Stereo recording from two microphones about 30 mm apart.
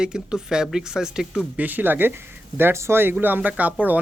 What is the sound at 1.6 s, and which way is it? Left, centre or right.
Speech, right.